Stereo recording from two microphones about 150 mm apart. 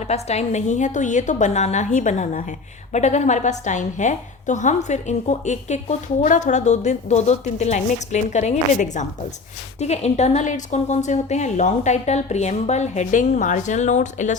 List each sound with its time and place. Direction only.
0.1 s a woman's voice: 45° left (ahead or behind)